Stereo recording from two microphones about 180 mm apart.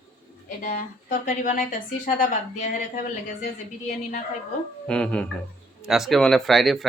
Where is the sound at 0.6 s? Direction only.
50° left (ahead or behind).